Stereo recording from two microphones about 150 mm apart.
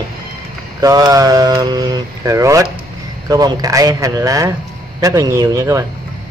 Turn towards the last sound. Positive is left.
turn(degrees=-20)  # may be behind; listen again after turning